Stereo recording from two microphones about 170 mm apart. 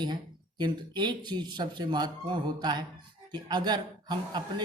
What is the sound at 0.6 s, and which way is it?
A man's voice, 25° right (ahead or behind).